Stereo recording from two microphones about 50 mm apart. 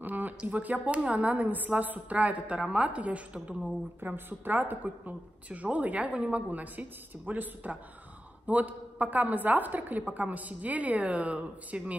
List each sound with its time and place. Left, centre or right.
0.0 s a sound: right
0.4 s a woman's voice: right
4.0 s a woman's voice: right